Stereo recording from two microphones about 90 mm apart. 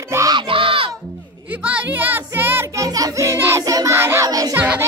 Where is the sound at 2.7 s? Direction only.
40° right (ahead or behind).